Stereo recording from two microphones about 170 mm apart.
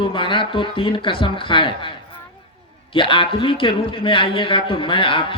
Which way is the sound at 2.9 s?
30° left (ahead or behind).